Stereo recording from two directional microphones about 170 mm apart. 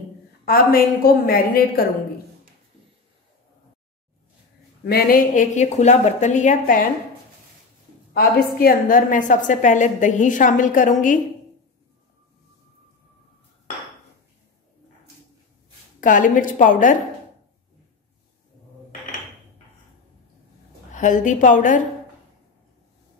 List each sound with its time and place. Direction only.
0.5 s a woman's voice: 60° left (ahead or behind)
4.8 s a woman's voice: 60° left (ahead or behind)
8.1 s a woman's voice: 65° left (ahead or behind)
16.0 s a woman's voice: 50° left (ahead or behind)
20.9 s a woman's voice: 50° left (ahead or behind)